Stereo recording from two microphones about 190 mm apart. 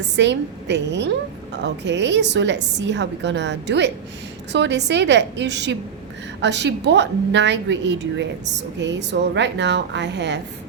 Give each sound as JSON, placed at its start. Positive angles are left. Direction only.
{"t": 0.2, "sound": "a woman's voice", "side_deg": -65}